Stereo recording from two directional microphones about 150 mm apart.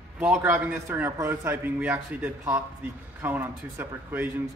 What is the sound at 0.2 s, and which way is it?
A man's voice, 15° right (ahead or behind).